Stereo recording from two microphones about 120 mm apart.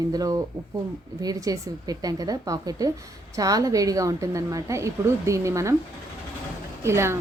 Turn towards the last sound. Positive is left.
turn(degrees=-20)  # may be behind; listen again after turning